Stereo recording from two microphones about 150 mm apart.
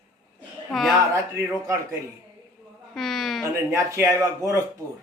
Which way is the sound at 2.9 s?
Centre (ahead or behind).